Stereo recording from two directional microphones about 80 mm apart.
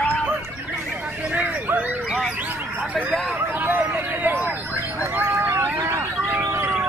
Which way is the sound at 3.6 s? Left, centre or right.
Right.